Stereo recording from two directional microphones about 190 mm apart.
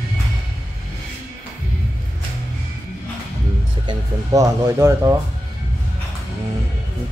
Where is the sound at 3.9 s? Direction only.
15° right (ahead or behind).